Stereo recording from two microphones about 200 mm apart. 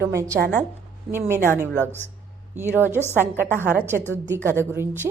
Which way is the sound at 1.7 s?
10° left (ahead or behind).